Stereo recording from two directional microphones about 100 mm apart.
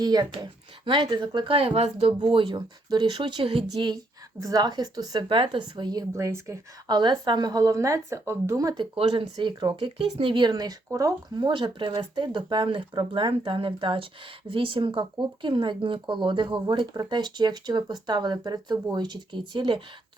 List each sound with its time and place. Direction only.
0.0 s speech: 45° right (ahead or behind); by 2.1 s 85° right
2.2 s speech: 60° right (ahead or behind)
4.4 s a woman's voice: 40° right (ahead or behind)
5.3 s speech: 60° right (ahead or behind); by 6.1 s 45° right (ahead or behind)
6.1 s speech: 30° right (ahead or behind)
6.8 s a woman's voice: 45° right (ahead or behind)
8.8 s speech: 60° right (ahead or behind); by 11.4 s 35° right (ahead or behind)
11.4 s speech: 50° right (ahead or behind)